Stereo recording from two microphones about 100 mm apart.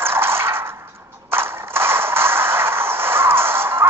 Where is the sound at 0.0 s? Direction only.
25° right (ahead or behind).